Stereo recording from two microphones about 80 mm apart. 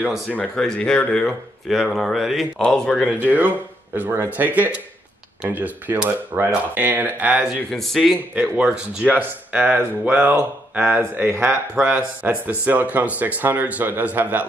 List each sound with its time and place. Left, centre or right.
0.6 s speech: centre
2.6 s speech: centre
3.2 s speech: right
7.4 s speech: centre; by 14.4 s right